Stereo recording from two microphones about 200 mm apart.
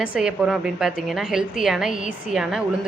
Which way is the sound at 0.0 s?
5° right (ahead or behind).